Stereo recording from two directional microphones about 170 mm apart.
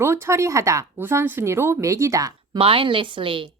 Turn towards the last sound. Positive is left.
turn(degrees=-30)  # may be behind; listen again after turning